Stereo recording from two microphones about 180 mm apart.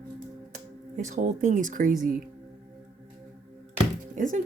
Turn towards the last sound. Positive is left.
turn(degrees=-45)  # may be behind; listen again after turning